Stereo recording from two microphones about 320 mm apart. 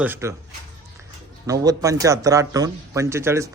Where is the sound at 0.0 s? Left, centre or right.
Centre.